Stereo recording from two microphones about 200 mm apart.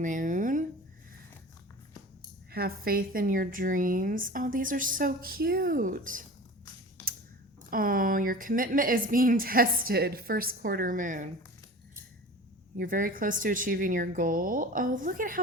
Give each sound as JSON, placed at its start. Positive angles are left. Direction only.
{"t": 0.0, "sound": "a sound", "side_deg": -40}
{"t": 2.5, "sound": "a woman's voice", "side_deg": -50}
{"t": 7.7, "sound": "a woman's voice", "side_deg": -45}
{"t": 12.8, "sound": "a woman's voice", "side_deg": -45}